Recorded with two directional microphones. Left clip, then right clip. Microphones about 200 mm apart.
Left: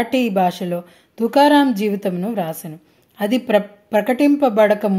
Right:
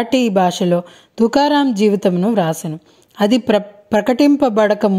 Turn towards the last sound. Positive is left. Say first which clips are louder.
# right 1 dB
turn(degrees=-40)  # may be behind; listen again after turning